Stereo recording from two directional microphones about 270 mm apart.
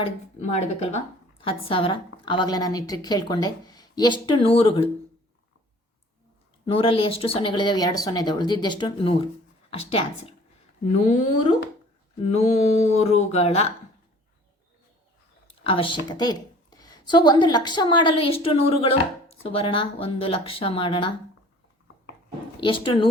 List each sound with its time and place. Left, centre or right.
0.0 s a woman's voice: left
6.7 s a woman's voice: centre
15.6 s a woman's voice: centre
22.6 s a woman's voice: centre